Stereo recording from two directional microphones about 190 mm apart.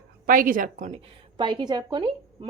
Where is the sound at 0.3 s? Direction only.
45° right (ahead or behind).